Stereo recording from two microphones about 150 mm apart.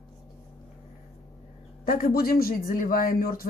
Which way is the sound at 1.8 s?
75° left (ahead or behind).